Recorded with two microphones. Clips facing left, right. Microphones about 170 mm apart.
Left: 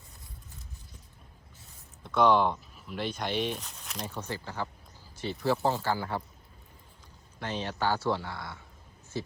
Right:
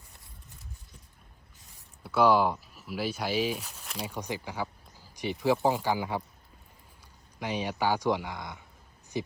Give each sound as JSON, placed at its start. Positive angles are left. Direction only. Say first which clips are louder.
{"t": 2.0, "sound": "speech", "louder": "right 1 dB", "side_deg": -5}
{"t": 4.1, "sound": "speech", "louder": "right 2 dB", "side_deg": -15}
{"t": 7.3, "sound": "speech", "louder": "right 2 dB", "side_deg": -10}